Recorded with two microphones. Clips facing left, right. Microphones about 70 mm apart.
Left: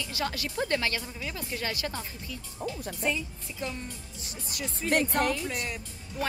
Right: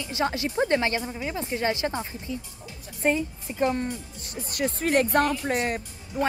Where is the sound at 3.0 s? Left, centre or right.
Right.